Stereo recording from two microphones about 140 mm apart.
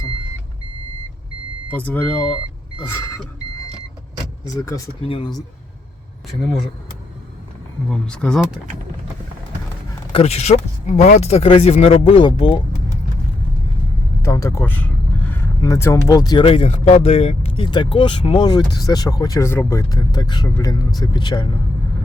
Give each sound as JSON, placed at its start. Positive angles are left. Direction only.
{"t": 1.7, "sound": "speech", "side_deg": 10}
{"t": 4.4, "sound": "speech", "side_deg": 25}
{"t": 5.0, "sound": "speech", "side_deg": 40}
{"t": 7.9, "sound": "speech", "side_deg": 5}
{"t": 10.1, "sound": "speech", "side_deg": 45}
{"t": 14.2, "sound": "speech", "side_deg": 20}
{"t": 16.5, "sound": "speech", "side_deg": 50}
{"t": 17.7, "sound": "speech", "side_deg": 35}